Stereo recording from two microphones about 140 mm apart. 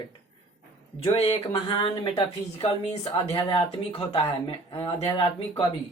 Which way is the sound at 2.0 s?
45° left (ahead or behind).